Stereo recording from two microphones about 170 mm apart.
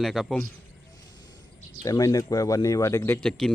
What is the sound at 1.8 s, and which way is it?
Speech, 20° left (ahead or behind).